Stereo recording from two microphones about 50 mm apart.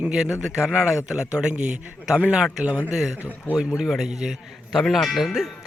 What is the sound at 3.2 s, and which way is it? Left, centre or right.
Speech, left.